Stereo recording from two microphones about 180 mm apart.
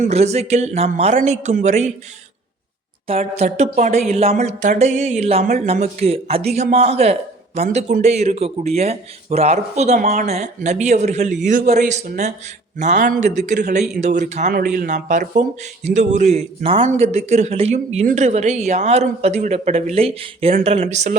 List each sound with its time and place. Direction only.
0.1 s speech: 35° right (ahead or behind)
3.1 s speech: 35° right (ahead or behind)
10.0 s speech: 50° right (ahead or behind)
10.2 s speech: 40° right (ahead or behind)